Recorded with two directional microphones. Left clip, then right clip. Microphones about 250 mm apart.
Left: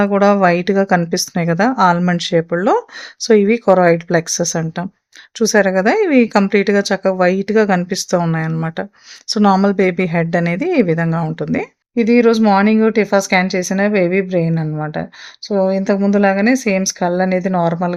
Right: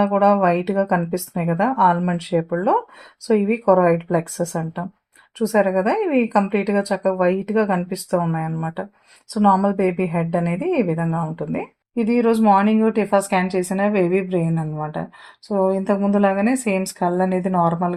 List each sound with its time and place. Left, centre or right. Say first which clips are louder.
0.0 s speech: left 4 dB; left